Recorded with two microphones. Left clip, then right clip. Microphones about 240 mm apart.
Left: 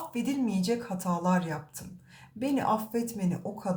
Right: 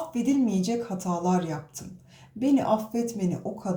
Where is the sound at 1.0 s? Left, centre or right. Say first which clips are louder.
Right 2 dB; left.